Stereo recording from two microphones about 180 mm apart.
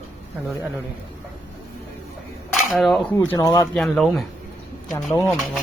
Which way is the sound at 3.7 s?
5° left (ahead or behind).